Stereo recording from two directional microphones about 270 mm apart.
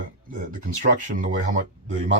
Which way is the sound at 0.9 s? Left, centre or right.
Right.